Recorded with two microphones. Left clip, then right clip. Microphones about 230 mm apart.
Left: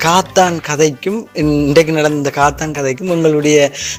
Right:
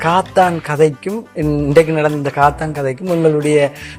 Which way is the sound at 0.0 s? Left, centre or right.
Left.